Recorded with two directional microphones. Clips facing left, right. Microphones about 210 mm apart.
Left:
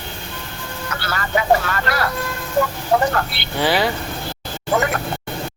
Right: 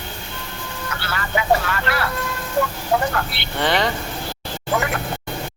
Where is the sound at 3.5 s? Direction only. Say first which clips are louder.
Left 2 dB; 5° left (ahead or behind).